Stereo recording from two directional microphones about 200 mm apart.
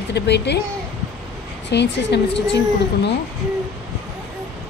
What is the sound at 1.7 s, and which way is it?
Speech, 60° left (ahead or behind).